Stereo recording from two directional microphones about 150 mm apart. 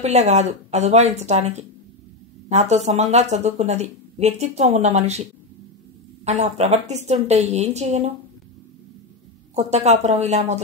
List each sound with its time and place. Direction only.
0.0 s speech: 50° right (ahead or behind)
9.6 s speech: 50° right (ahead or behind)